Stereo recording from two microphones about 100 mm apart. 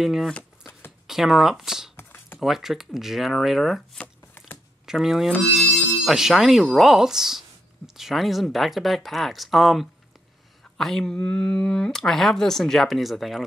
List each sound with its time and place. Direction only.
0.0 s speech: 5° right (ahead or behind)
2.0 s a sound: 20° left (ahead or behind)
2.4 s speech: centre (ahead or behind)